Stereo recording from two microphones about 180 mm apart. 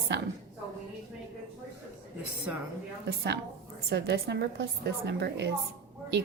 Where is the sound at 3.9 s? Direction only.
65° right (ahead or behind).